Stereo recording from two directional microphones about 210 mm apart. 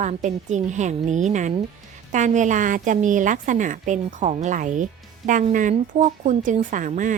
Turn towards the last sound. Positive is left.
turn(degrees=-40)  # may be behind; listen again after turning